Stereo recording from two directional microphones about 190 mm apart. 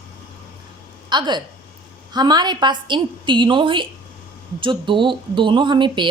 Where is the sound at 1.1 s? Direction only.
20° right (ahead or behind).